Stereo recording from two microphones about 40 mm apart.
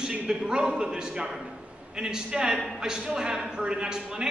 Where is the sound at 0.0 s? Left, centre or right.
Right.